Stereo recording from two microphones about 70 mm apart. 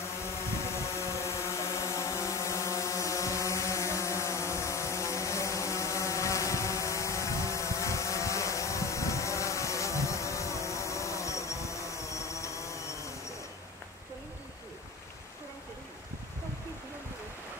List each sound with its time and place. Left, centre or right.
0.2 s vehicle: left